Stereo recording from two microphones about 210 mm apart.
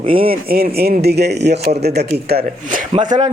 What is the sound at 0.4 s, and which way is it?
A man's voice, 45° right (ahead or behind).